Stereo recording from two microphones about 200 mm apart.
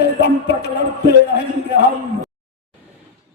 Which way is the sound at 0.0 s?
55° left (ahead or behind).